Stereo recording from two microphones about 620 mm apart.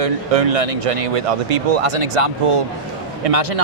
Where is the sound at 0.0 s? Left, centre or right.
Right.